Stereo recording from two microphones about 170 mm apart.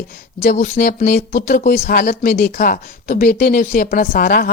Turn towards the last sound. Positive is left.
turn(degrees=60)  # may be behind; listen again after turning